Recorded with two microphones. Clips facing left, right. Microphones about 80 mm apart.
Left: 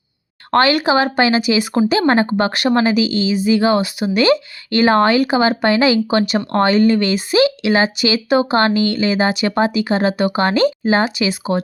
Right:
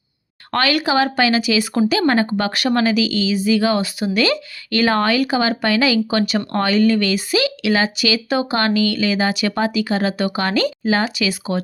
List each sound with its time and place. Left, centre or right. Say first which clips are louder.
0.5 s speech: left 4 dB; left